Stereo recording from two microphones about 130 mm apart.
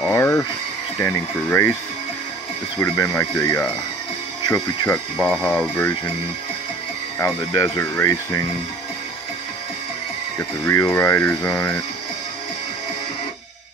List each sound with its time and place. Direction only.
0.1 s speech: 20° left (ahead or behind)
2.8 s speech: 20° left (ahead or behind)
5.1 s speech: 5° left (ahead or behind)
5.8 s speech: 15° left (ahead or behind)
7.2 s speech: 20° left (ahead or behind)
10.6 s speech: 20° left (ahead or behind)